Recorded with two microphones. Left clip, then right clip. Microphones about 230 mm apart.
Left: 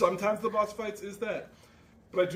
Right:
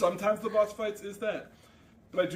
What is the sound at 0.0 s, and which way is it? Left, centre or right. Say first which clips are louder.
A man's voice: left 1 dB; centre.